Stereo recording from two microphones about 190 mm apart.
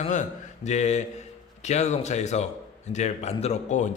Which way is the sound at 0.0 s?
40° left (ahead or behind).